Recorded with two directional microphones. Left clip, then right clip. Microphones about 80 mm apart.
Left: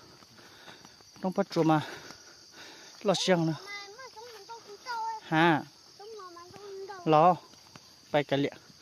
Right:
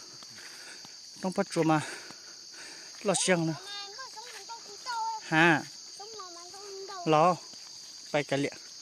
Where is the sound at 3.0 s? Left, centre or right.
Left.